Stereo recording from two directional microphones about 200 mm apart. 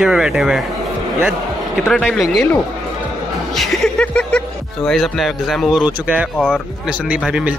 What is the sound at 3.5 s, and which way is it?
Speech, centre (ahead or behind).